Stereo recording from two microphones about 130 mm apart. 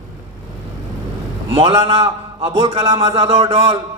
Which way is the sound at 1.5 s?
40° right (ahead or behind).